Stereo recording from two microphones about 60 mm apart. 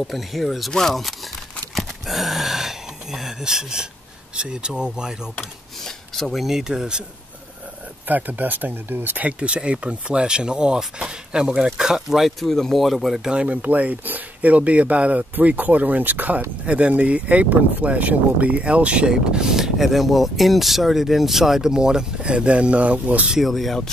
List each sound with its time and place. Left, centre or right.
0.0 s speech: centre
1.8 s a sound: centre
4.4 s speech: centre
5.4 s speech: centre
8.1 s speech: right; by 13.3 s centre
13.3 s speech: right
16.6 s speech: centre
23.4 s speech: centre